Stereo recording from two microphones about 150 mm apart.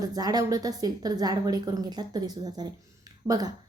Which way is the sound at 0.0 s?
25° right (ahead or behind).